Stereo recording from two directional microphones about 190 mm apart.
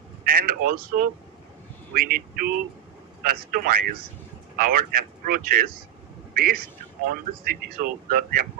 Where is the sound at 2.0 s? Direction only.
50° right (ahead or behind).